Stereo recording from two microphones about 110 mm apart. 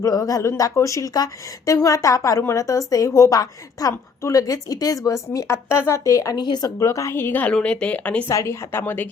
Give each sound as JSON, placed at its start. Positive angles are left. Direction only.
{"t": 0.0, "sound": "a woman's voice", "side_deg": 35}
{"t": 8.3, "sound": "a woman's voice", "side_deg": 25}